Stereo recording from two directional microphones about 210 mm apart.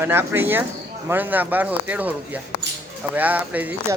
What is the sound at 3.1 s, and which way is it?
Speech, 10° right (ahead or behind).